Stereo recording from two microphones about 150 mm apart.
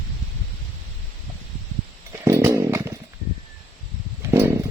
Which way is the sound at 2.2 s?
20° right (ahead or behind).